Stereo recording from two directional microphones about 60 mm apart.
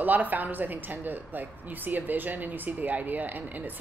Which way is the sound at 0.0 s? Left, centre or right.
Right.